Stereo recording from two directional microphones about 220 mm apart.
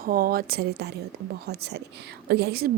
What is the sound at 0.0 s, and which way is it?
A woman's voice, 40° right (ahead or behind).